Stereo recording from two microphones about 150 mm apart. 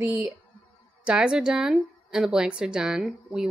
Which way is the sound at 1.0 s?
5° right (ahead or behind).